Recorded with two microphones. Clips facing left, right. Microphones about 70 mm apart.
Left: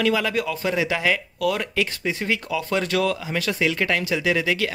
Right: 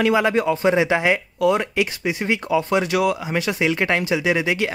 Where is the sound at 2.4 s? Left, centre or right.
Right.